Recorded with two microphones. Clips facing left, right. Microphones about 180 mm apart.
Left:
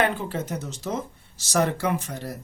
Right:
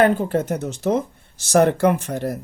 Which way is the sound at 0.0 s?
40° right (ahead or behind).